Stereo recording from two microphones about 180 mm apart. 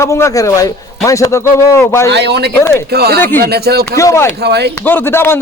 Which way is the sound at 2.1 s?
70° right (ahead or behind).